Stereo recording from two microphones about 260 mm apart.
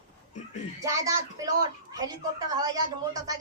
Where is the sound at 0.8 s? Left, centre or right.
Centre.